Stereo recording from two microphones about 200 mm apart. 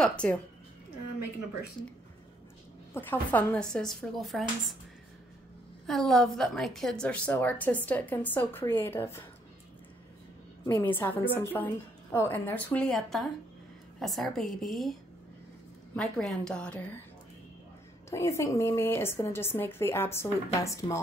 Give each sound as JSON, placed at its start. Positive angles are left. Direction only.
{"t": 0.2, "sound": "speech", "side_deg": 5}
{"t": 2.9, "sound": "speech", "side_deg": 10}
{"t": 5.9, "sound": "a woman's voice", "side_deg": 0}
{"t": 10.6, "sound": "a woman's voice", "side_deg": 10}
{"t": 16.0, "sound": "speech", "side_deg": 5}
{"t": 18.1, "sound": "a woman's voice", "side_deg": 15}